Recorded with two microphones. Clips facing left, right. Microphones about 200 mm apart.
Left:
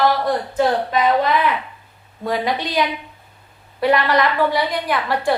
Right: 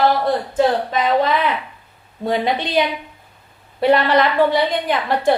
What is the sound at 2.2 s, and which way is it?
A woman's voice, 25° right (ahead or behind).